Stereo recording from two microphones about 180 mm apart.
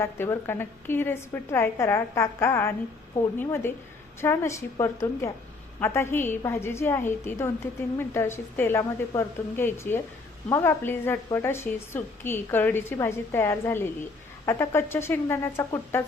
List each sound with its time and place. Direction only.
0.0 s a woman's voice: 15° left (ahead or behind)